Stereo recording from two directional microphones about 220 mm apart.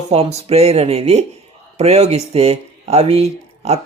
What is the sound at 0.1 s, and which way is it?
Speech, 30° right (ahead or behind).